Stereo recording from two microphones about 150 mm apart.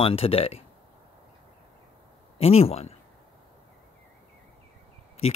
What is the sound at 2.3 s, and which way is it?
Speech, 40° left (ahead or behind).